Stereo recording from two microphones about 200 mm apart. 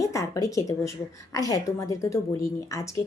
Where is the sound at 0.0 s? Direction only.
15° left (ahead or behind).